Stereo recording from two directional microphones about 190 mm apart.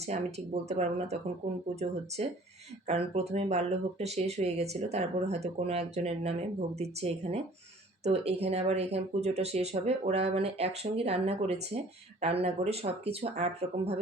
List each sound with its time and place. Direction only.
0.0 s speech: 35° right (ahead or behind)